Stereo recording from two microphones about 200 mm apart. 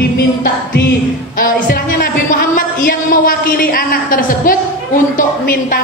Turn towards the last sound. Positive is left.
turn(degrees=45)  # may be behind; listen again after turning